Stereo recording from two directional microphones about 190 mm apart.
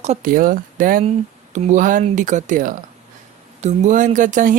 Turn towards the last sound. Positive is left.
turn(degrees=-45)  # may be behind; listen again after turning